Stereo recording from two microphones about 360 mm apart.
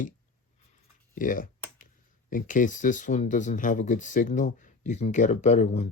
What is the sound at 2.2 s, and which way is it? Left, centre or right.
Speech, left.